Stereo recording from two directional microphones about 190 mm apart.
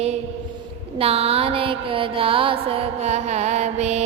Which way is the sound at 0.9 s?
30° right (ahead or behind).